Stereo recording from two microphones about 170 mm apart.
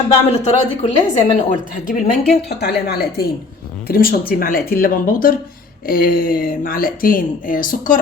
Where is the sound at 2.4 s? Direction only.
75° left (ahead or behind).